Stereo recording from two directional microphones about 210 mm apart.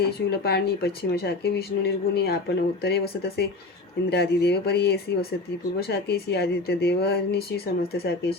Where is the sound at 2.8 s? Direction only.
50° left (ahead or behind).